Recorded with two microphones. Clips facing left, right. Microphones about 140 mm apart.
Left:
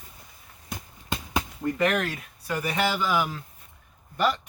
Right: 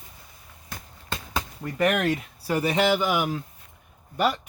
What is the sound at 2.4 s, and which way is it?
Speech, 25° right (ahead or behind).